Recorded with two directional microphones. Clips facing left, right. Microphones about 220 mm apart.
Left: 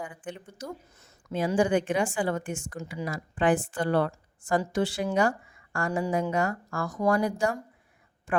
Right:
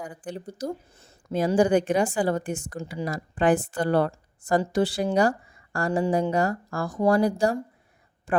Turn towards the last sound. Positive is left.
turn(degrees=-35)  # may be behind; listen again after turning